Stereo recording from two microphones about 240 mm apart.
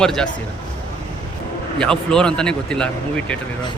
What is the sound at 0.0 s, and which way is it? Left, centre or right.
Speech, centre.